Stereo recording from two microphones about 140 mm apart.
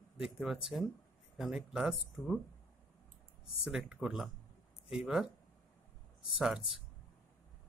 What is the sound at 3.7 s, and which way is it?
Speech, 5° right (ahead or behind).